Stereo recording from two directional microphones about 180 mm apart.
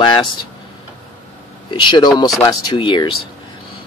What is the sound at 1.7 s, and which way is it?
Speech, 25° left (ahead or behind).